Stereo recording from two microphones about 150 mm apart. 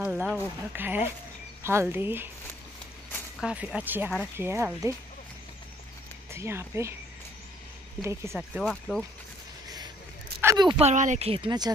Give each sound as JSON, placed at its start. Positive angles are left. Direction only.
{"t": 0.0, "sound": "speech", "side_deg": -10}
{"t": 3.4, "sound": "speech", "side_deg": -10}
{"t": 6.3, "sound": "speech", "side_deg": -15}
{"t": 8.0, "sound": "speech", "side_deg": -20}
{"t": 8.6, "sound": "speech", "side_deg": 5}
{"t": 10.4, "sound": "speech", "side_deg": -25}
{"t": 10.8, "sound": "speech", "side_deg": -50}